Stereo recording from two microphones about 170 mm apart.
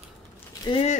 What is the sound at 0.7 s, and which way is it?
Speech, 40° left (ahead or behind).